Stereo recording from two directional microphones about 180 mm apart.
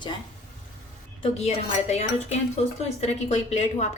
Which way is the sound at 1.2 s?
35° left (ahead or behind).